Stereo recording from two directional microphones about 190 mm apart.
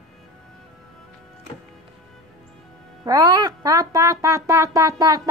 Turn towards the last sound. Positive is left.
turn(degrees=-20)  # may be behind; listen again after turning